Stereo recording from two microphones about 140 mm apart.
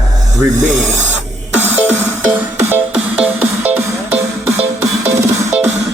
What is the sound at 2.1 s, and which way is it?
Music, 15° right (ahead or behind).